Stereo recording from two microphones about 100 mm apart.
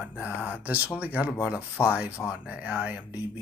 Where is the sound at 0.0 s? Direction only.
15° right (ahead or behind).